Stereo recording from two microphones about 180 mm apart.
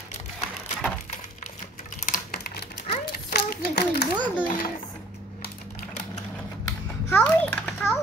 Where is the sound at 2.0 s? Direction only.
50° left (ahead or behind).